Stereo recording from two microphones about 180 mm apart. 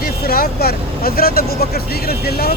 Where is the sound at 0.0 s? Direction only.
55° left (ahead or behind).